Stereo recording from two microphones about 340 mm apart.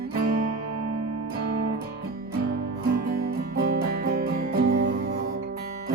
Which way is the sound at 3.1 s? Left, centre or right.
Right.